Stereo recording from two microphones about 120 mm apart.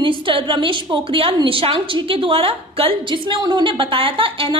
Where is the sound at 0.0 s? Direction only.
45° right (ahead or behind).